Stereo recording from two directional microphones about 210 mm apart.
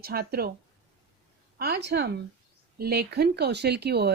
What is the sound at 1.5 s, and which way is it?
Speech, 50° right (ahead or behind).